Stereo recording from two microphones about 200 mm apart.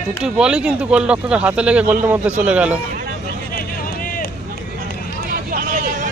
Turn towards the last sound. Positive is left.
turn(degrees=-45)  # may be behind; listen again after turning